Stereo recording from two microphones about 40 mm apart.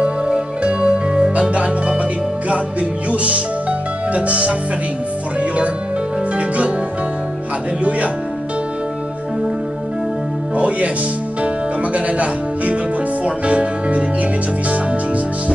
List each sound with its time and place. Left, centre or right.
0.3 s music: right
3.1 s music: right
4.1 s speech: right
6.3 s music: right
10.5 s music: right